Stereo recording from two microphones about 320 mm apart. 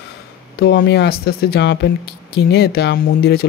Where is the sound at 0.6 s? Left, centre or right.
Left.